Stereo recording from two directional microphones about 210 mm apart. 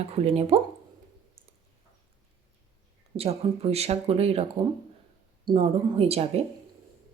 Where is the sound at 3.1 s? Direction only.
30° right (ahead or behind).